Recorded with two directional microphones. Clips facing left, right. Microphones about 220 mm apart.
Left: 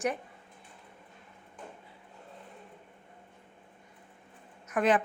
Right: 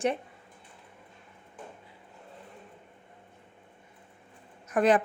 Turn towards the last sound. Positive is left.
turn(degrees=-35)  # may be behind; listen again after turning